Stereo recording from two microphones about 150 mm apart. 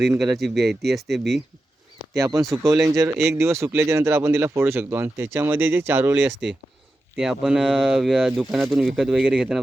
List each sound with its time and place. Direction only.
0.2 s speech: centre (ahead or behind)
2.4 s speech: centre (ahead or behind)
2.8 s speech: 20° right (ahead or behind)
7.2 s speech: 5° right (ahead or behind)